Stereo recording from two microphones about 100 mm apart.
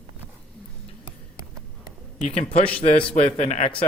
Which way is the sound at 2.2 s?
90° left.